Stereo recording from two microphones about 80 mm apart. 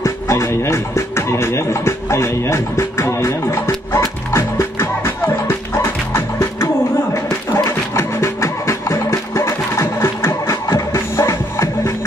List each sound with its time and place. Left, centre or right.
0.0 s speech: left
4.3 s music: left
7.2 s a sound: left
7.9 s music: left